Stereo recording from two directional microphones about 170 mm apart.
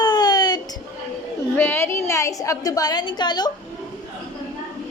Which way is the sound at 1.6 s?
15° left (ahead or behind).